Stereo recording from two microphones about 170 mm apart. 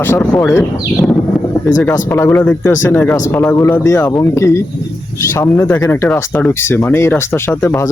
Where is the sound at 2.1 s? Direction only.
15° left (ahead or behind).